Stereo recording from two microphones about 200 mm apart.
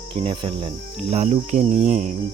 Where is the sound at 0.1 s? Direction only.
25° right (ahead or behind).